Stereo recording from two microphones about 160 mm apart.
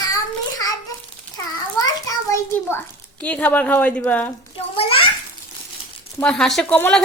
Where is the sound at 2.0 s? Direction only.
20° left (ahead or behind).